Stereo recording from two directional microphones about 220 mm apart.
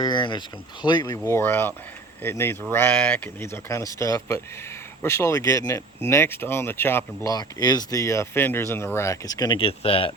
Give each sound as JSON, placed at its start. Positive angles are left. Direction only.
{"t": 0.0, "sound": "speech", "side_deg": 20}